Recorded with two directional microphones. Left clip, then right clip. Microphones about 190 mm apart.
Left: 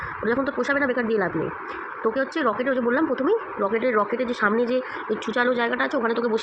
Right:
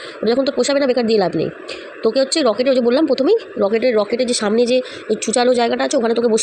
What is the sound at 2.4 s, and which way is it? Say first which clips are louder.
Speech: right 6 dB; 45° right (ahead or behind).